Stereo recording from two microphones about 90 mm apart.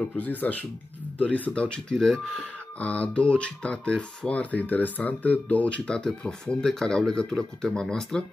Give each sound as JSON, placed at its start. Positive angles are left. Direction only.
{"t": 0.2, "sound": "speech", "side_deg": 20}